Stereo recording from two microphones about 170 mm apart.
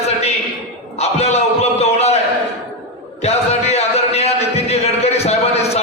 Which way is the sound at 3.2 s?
40° left (ahead or behind).